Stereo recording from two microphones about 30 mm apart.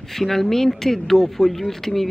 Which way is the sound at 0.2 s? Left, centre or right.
Centre.